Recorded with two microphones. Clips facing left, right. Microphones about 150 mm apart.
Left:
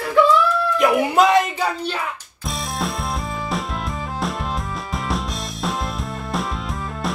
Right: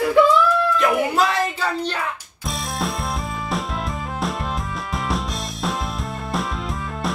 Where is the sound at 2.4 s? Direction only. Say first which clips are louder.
Even; centre (ahead or behind).